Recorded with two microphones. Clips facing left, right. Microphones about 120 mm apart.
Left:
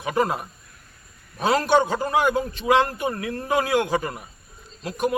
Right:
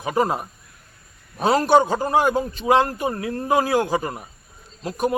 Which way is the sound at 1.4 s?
40° right (ahead or behind).